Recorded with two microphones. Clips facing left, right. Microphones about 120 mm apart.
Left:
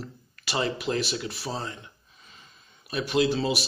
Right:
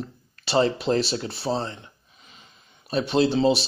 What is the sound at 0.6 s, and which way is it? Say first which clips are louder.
Speech: right 6 dB; 30° right (ahead or behind).